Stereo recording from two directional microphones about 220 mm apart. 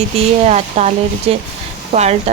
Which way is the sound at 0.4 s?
30° right (ahead or behind).